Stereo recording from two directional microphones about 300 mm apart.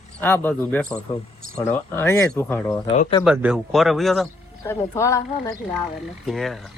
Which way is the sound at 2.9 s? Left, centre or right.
Left.